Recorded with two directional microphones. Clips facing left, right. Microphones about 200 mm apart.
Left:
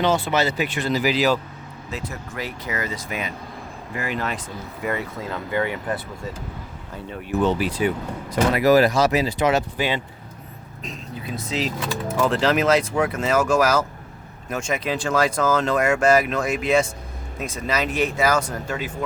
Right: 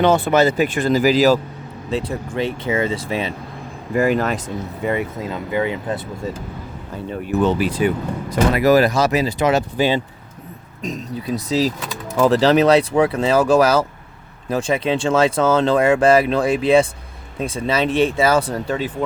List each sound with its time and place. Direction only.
0.0 s speech: 55° right (ahead or behind)
1.9 s speech: 30° right (ahead or behind)
3.9 s speech: 45° right (ahead or behind)
4.8 s speech: 20° right (ahead or behind)
7.3 s speech: 50° right (ahead or behind); by 18.9 s 30° right (ahead or behind)